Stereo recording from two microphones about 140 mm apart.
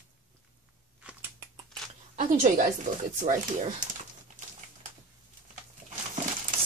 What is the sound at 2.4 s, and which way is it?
Speech, 65° right (ahead or behind).